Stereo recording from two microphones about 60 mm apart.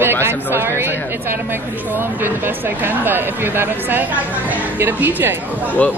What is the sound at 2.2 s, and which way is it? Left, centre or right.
Speech, right.